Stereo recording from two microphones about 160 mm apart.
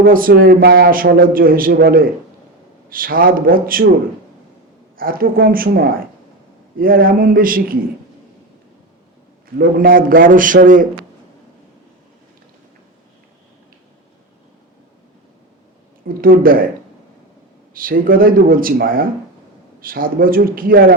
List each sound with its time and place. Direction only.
0.0 s a man's voice: 65° right (ahead or behind)
4.9 s a man's voice: 65° right (ahead or behind)
9.6 s a man's voice: 60° right (ahead or behind)
16.0 s a man's voice: 65° right (ahead or behind)
17.7 s a man's voice: 60° right (ahead or behind)